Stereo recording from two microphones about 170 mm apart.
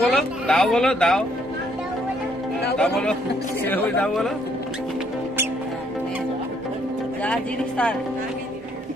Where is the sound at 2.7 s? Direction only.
5° left (ahead or behind).